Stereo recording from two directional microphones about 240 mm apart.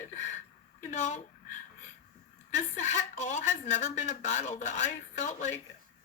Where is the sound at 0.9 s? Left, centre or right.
Left.